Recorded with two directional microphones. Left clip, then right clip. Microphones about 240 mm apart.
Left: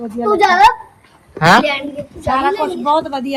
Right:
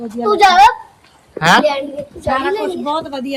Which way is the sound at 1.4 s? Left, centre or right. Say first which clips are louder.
Left 1 dB; centre.